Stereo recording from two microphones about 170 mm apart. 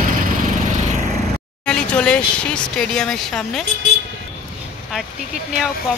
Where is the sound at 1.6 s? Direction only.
5° left (ahead or behind).